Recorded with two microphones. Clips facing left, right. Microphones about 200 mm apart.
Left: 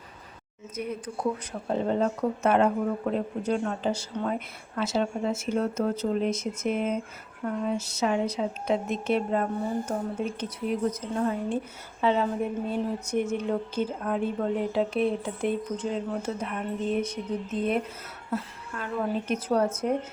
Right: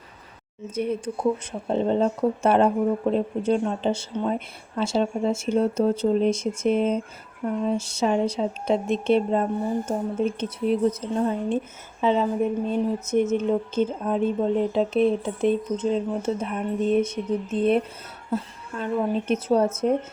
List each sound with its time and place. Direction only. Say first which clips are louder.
0.8 s speech: right 6 dB; 25° right (ahead or behind)